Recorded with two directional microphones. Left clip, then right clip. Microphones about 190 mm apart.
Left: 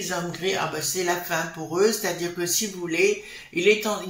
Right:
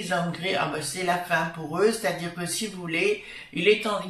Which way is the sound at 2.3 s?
40° left (ahead or behind).